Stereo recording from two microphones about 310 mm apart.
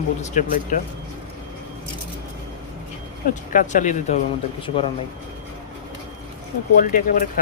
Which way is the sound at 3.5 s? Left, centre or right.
Left.